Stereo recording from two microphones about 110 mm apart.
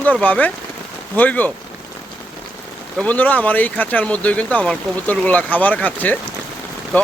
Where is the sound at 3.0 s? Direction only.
15° left (ahead or behind).